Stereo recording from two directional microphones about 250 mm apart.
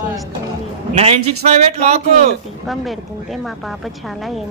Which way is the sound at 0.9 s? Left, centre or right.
Right.